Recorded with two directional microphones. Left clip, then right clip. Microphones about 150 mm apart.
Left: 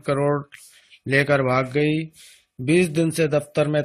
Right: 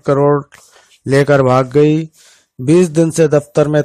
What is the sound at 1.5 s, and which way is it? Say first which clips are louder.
Speech: right 10 dB; 50° right (ahead or behind).